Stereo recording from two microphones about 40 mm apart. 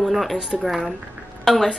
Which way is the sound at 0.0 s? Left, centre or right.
Centre.